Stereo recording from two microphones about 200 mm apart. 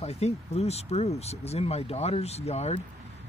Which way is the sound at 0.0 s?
30° left (ahead or behind).